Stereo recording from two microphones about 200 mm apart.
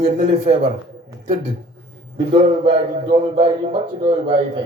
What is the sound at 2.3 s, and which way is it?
A man's voice, 30° right (ahead or behind).